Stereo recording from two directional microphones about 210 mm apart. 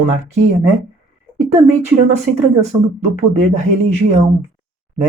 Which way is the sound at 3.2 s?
30° right (ahead or behind).